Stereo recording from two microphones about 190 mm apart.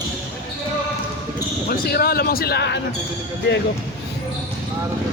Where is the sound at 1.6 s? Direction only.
55° left (ahead or behind).